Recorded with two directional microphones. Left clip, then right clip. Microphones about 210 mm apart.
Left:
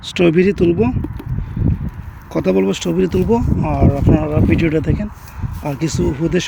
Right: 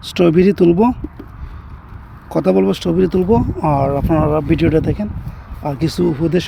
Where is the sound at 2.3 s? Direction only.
10° right (ahead or behind).